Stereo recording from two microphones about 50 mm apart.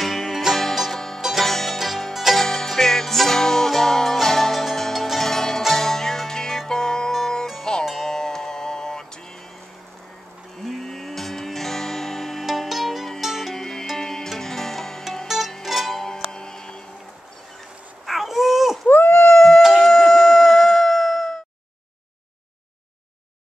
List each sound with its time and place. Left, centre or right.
0.0 s music: centre
0.9 s music: centre
2.4 s music: centre
5.0 s zither: centre
5.6 s music: centre
10.6 s music: centre
12.4 s music: centre
13.6 s music: centre
15.2 s music: centre
16.0 s music: centre
18.0 s a sound: centre
18.9 s dog: left
19.3 s howl: centre
19.6 s a sound: centre